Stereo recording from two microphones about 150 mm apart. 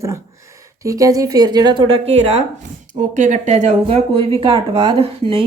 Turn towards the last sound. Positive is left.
turn(degrees=-40)  # may be behind; listen again after turning